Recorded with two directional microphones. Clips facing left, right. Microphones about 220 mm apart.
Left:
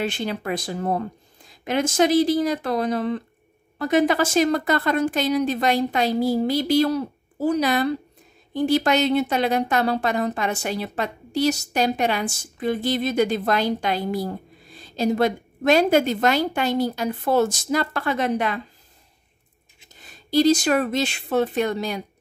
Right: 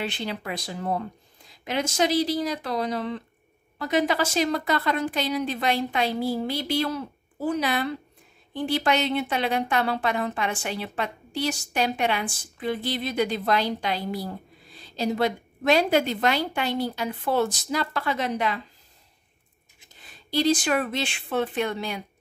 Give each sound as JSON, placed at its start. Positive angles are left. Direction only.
{"t": 0.0, "sound": "a woman's voice", "side_deg": 45}
{"t": 20.0, "sound": "speech", "side_deg": 45}